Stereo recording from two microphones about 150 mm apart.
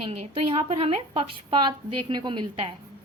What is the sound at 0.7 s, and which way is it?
A woman's voice, 40° right (ahead or behind).